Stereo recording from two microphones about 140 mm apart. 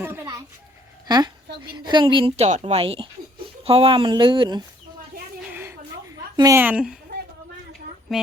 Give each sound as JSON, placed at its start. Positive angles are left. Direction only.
{"t": 0.0, "sound": "a sound", "side_deg": -15}
{"t": 1.0, "sound": "speech", "side_deg": -30}
{"t": 5.5, "sound": "a sound", "side_deg": -15}
{"t": 6.3, "sound": "a woman's voice", "side_deg": -25}
{"t": 6.6, "sound": "a woman's voice", "side_deg": -10}
{"t": 8.1, "sound": "speech", "side_deg": -5}